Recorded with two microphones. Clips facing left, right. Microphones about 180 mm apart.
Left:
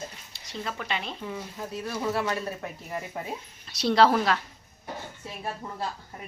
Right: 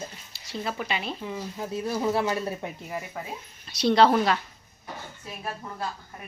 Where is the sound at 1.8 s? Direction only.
20° right (ahead or behind).